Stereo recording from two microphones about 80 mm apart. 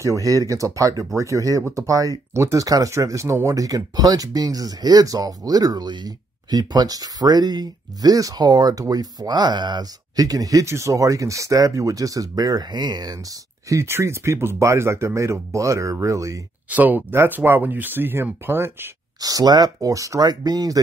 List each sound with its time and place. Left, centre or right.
0.0 s speech: right
13.7 s speech: right
16.6 s speech: right
19.1 s speech: right